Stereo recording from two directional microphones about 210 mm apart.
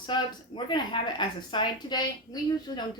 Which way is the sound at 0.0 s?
20° left (ahead or behind).